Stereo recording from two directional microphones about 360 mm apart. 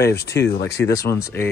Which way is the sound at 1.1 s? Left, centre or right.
Centre.